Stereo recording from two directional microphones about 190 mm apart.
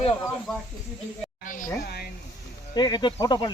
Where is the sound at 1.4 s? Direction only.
45° left (ahead or behind).